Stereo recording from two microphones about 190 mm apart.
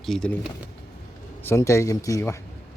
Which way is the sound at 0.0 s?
5° left (ahead or behind).